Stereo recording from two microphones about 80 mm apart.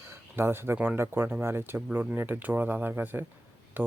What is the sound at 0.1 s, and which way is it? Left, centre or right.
Speech, right.